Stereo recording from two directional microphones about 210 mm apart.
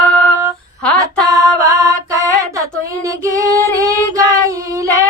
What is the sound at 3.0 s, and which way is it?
Female singing, 15° right (ahead or behind).